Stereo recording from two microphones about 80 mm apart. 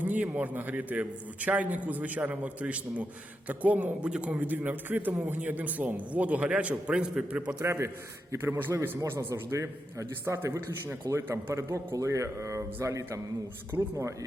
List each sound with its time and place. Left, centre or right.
0.0 s a man's voice: right
7.6 s a man's voice: right
9.0 s a man's voice: right